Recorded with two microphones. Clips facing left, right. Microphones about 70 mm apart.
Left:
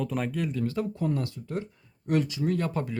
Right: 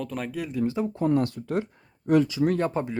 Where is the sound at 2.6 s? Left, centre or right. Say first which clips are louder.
Right 4 dB; right.